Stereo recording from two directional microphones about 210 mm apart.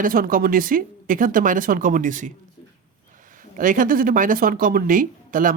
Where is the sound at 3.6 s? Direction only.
40° right (ahead or behind).